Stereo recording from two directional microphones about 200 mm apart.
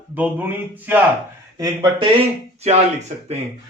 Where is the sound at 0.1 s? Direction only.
10° right (ahead or behind).